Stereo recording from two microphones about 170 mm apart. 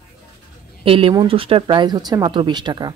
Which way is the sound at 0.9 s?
35° right (ahead or behind).